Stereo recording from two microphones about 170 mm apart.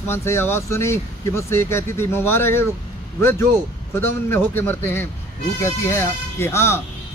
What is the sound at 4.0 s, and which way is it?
A man's voice, 15° left (ahead or behind).